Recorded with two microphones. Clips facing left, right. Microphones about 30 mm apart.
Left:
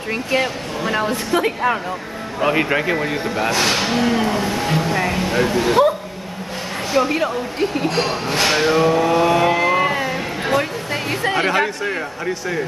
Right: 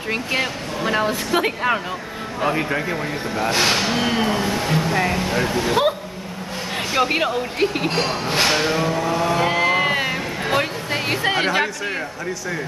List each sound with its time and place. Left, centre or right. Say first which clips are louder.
0.3 s speech: left 3 dB; centre
2.5 s speech: left 4 dB; left
3.4 s speech: even; centre
3.7 s speech: left 1 dB; centre
4.0 s speech: left 2 dB; centre
7.0 s speech: left 1 dB; right
7.9 s speech: left 1 dB; centre
9.5 s a sound: left 2 dB; centre
9.8 s a sound: even; right
10.5 s music: left 1 dB; centre
11.3 s speech: left 4 dB; right
11.6 s speech: left 2 dB; centre